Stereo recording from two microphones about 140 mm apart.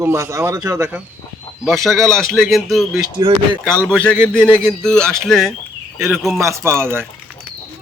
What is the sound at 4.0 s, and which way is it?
Speech, 10° left (ahead or behind).